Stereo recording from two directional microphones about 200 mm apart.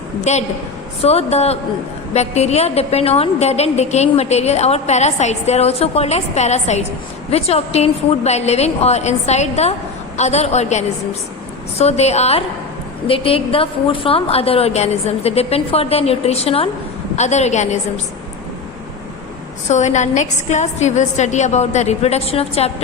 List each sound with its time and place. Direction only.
0.3 s a woman's voice: 35° left (ahead or behind)
19.6 s a woman's voice: 35° left (ahead or behind)